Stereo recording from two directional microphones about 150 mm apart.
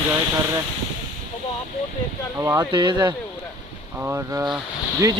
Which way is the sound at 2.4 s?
20° right (ahead or behind).